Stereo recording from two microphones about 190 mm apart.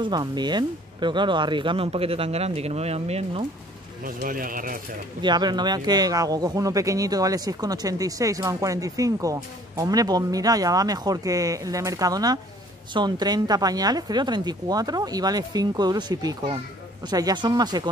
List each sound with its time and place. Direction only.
0.0 s speech: 25° right (ahead or behind)
4.0 s speech: 45° right (ahead or behind)
5.2 s speech: 20° right (ahead or behind)